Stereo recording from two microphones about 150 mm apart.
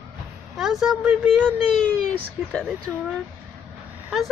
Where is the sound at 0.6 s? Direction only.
Centre (ahead or behind).